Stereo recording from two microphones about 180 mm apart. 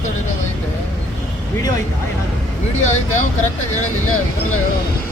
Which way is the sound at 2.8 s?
40° left (ahead or behind).